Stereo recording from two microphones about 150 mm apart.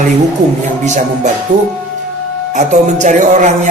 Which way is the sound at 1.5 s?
55° right (ahead or behind).